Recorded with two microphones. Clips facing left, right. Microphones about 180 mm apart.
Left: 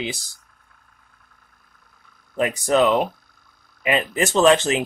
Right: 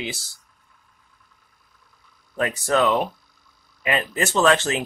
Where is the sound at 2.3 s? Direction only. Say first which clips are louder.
Left 3 dB; 15° left (ahead or behind).